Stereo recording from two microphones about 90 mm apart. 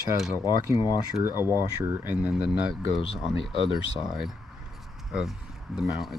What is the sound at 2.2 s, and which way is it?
Speech, 10° right (ahead or behind).